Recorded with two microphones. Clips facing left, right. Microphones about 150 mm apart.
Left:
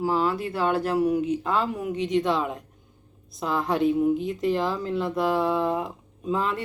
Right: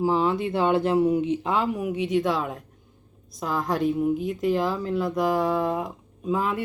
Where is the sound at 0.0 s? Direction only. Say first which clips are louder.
Right 2 dB; 20° right (ahead or behind).